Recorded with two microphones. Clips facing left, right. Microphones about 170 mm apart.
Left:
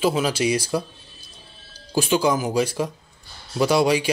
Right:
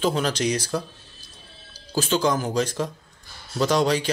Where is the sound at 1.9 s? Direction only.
10° left (ahead or behind).